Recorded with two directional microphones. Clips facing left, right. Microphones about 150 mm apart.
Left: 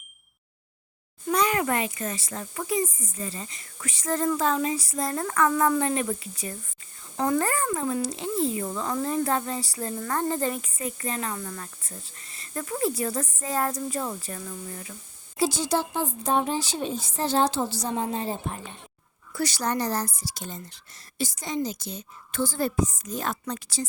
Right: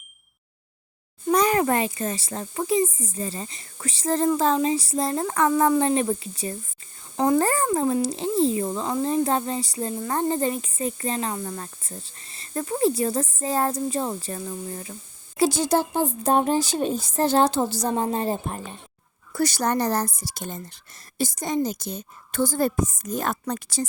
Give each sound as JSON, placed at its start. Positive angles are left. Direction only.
{"t": 1.3, "sound": "speech", "side_deg": -40}
{"t": 15.4, "sound": "a woman's voice", "side_deg": -55}